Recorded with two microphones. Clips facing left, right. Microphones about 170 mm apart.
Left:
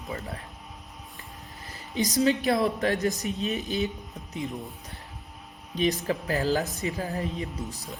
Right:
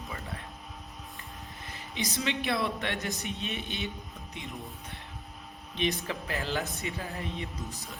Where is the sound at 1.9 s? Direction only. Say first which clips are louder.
Left 9 dB; 40° left (ahead or behind).